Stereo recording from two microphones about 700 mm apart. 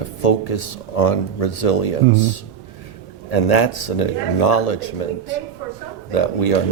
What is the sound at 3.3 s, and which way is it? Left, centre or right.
Speech, left.